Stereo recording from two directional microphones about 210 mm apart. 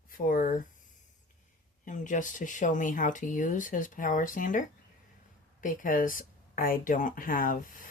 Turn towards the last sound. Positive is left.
turn(degrees=40)  # may be behind; listen again after turning